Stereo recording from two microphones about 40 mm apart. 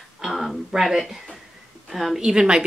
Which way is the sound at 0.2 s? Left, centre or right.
Centre.